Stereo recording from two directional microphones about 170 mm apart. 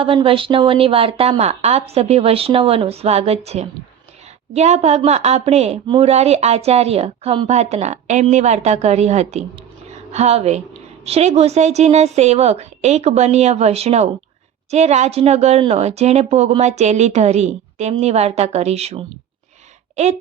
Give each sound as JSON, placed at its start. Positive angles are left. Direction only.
{"t": 0.0, "sound": "a woman's voice", "side_deg": -30}